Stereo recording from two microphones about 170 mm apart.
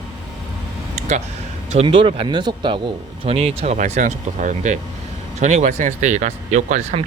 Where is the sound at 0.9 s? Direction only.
45° right (ahead or behind).